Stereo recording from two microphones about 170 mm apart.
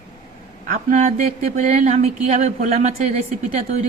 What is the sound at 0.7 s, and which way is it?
A man's voice, 50° right (ahead or behind).